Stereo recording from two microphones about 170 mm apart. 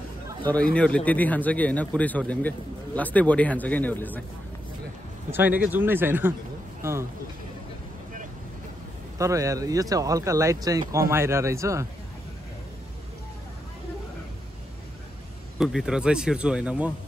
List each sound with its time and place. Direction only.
0.5 s a man's voice: 5° left (ahead or behind)
5.3 s speech: 10° right (ahead or behind)
9.2 s speech: 20° right (ahead or behind)
15.6 s speech: 5° right (ahead or behind)